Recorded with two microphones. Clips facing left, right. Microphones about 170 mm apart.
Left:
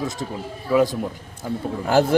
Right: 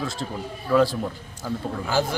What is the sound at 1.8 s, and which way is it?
Speech, 55° left (ahead or behind).